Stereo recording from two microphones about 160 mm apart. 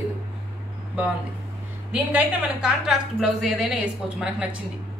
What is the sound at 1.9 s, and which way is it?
A woman's voice, 5° right (ahead or behind).